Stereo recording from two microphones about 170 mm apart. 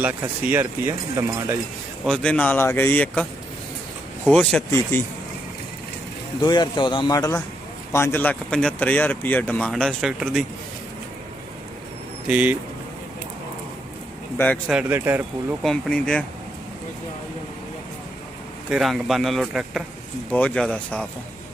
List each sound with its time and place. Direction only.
0.5 s speech: 15° right (ahead or behind)
2.0 s speech: 5° left (ahead or behind)
4.3 s a man's voice: 5° left (ahead or behind)
6.4 s a man's voice: 25° left (ahead or behind); by 10.4 s centre (ahead or behind)
12.3 s speech: 10° right (ahead or behind)
14.3 s speech: 10° left (ahead or behind)
14.7 s speech: 10° right (ahead or behind)
15.6 s a man's voice: 5° left (ahead or behind)
18.7 s a man's voice: centre (ahead or behind)